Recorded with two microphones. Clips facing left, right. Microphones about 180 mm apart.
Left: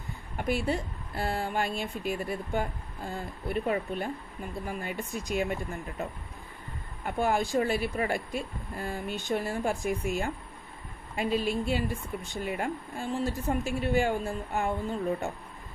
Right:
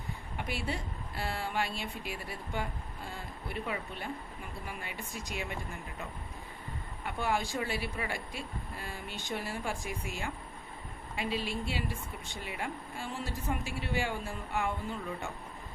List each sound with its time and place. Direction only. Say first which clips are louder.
0.3 s speech: left 8 dB; 45° left (ahead or behind)
7.0 s speech: left 5 dB; 45° left (ahead or behind)